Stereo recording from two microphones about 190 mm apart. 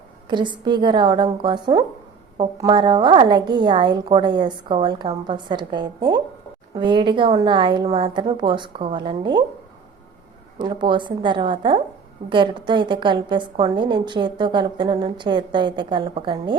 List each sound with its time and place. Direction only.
0.3 s a woman's voice: 25° right (ahead or behind)
10.6 s a woman's voice: 25° right (ahead or behind)